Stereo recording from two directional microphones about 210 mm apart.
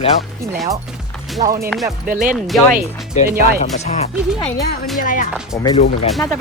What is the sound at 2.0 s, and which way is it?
Speech, 40° right (ahead or behind).